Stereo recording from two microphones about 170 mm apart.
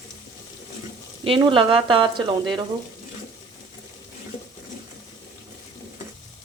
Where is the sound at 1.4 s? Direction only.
30° right (ahead or behind).